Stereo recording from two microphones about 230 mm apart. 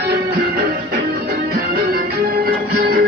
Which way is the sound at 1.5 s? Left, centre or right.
Right.